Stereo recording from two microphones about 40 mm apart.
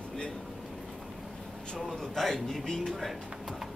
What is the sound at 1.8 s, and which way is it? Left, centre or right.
Speech, centre.